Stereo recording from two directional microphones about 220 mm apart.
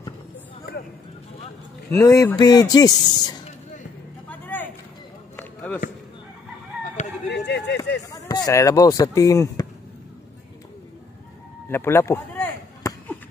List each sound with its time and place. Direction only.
1.9 s speech: 15° left (ahead or behind)
4.3 s vehicle: 10° left (ahead or behind)
5.3 s run: 10° left (ahead or behind)
7.2 s a sound: 50° left (ahead or behind)
8.1 s speech: 15° left (ahead or behind)
11.7 s a sound: 10° left (ahead or behind)